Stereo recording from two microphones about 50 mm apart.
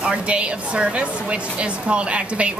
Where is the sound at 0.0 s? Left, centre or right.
Right.